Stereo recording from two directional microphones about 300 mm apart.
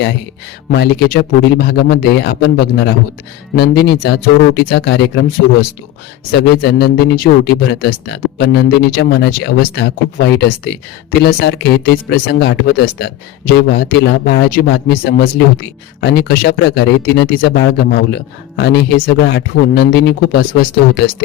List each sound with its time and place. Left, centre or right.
0.7 s speech: left